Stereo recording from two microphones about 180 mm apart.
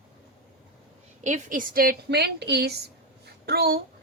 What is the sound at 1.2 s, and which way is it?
A woman's voice, 45° right (ahead or behind).